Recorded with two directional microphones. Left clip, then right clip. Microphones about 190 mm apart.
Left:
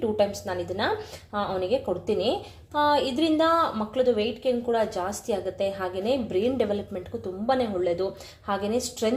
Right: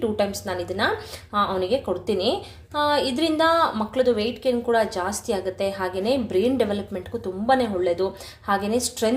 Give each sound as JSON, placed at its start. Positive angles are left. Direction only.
{"t": 0.0, "sound": "a woman's voice", "side_deg": 0}